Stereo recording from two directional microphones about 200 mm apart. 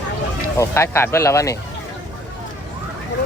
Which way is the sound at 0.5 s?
15° left (ahead or behind).